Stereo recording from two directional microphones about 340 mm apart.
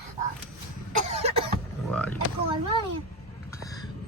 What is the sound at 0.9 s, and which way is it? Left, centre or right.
Cough, centre.